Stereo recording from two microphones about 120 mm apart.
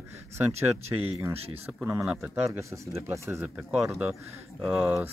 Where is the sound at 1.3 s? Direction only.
60° right (ahead or behind).